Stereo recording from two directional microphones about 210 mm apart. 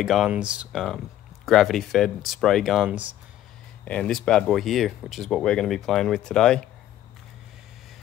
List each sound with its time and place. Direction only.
0.0 s speech: centre (ahead or behind)